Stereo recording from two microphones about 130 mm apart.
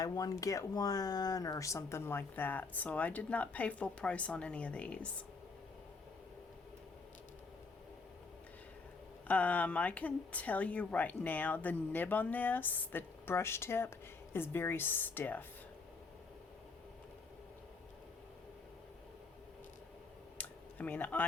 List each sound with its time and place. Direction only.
0.0 s speech: 25° left (ahead or behind); by 4.9 s 10° left (ahead or behind)
9.2 s speech: 10° left (ahead or behind)
20.4 s computer keyboard: 10° left (ahead or behind)